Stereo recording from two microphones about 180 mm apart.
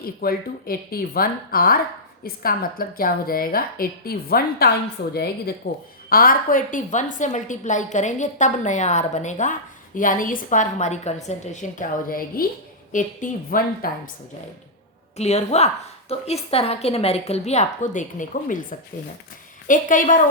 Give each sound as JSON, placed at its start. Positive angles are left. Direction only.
{"t": 0.0, "sound": "a woman's voice", "side_deg": 55}
{"t": 15.2, "sound": "a woman's voice", "side_deg": 35}
{"t": 19.6, "sound": "a woman's voice", "side_deg": 45}